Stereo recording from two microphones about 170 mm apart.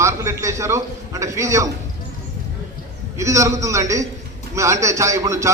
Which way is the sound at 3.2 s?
20° right (ahead or behind).